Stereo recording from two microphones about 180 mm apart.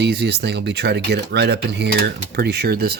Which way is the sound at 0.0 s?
65° right (ahead or behind).